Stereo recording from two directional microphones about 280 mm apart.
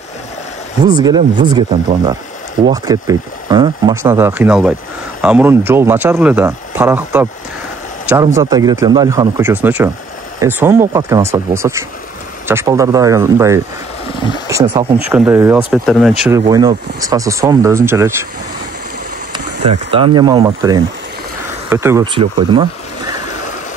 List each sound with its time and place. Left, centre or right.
0.8 s speech: centre
8.4 s speech: centre
19.9 s speech: centre